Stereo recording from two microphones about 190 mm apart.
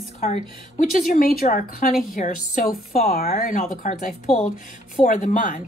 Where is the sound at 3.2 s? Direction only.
35° left (ahead or behind).